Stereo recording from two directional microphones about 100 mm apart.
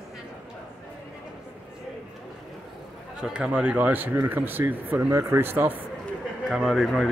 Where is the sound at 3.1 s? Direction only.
10° right (ahead or behind).